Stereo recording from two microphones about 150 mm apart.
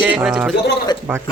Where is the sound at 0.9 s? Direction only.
30° left (ahead or behind).